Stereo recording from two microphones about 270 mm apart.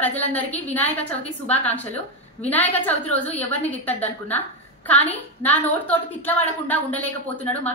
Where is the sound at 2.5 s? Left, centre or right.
Centre.